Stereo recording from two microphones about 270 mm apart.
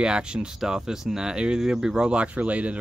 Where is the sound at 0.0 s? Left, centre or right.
Centre.